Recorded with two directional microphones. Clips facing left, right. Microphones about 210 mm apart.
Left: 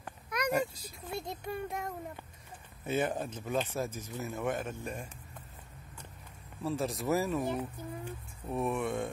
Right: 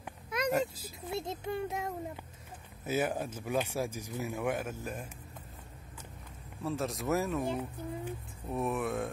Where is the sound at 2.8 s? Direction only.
5° right (ahead or behind).